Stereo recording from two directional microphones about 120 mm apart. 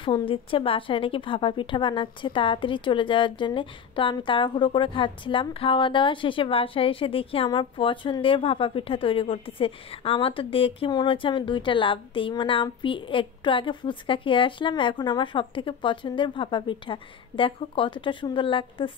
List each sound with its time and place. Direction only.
0.0 s a woman's voice: 45° left (ahead or behind)